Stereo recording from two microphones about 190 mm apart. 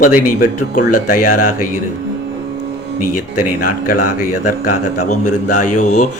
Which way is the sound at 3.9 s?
45° left (ahead or behind).